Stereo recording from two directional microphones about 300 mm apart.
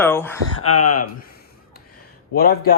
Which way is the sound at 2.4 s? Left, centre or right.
Left.